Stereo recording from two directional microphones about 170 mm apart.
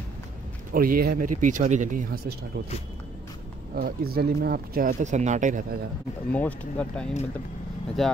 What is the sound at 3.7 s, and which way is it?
Speech, 65° right (ahead or behind).